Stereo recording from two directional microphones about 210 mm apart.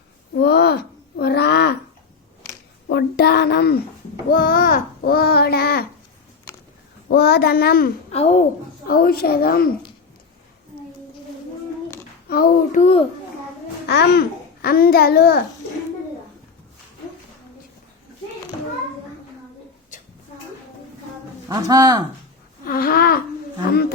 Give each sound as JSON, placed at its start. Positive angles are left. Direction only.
{"t": 0.3, "sound": "a sound", "side_deg": 50}
{"t": 2.8, "sound": "a child's voice", "side_deg": 50}
{"t": 7.1, "sound": "a child's voice", "side_deg": 50}
{"t": 8.1, "sound": "a child's voice", "side_deg": 30}
{"t": 8.9, "sound": "a child's voice", "side_deg": 45}
{"t": 12.3, "sound": "a child's voice", "side_deg": 40}
{"t": 13.8, "sound": "a child's voice", "side_deg": 50}
{"t": 21.5, "sound": "speech", "side_deg": -15}
{"t": 22.6, "sound": "a child's voice", "side_deg": 45}